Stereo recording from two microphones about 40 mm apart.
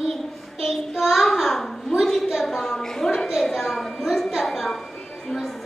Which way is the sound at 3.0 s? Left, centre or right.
Centre.